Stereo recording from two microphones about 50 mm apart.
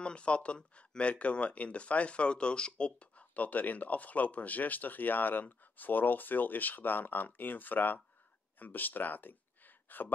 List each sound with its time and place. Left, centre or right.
0.0 s speech: left